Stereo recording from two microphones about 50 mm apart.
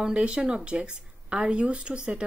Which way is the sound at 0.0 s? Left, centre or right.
Right.